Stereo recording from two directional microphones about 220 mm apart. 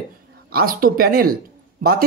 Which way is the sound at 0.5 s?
40° right (ahead or behind).